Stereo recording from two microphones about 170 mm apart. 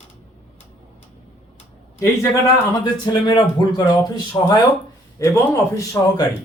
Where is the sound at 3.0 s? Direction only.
25° left (ahead or behind).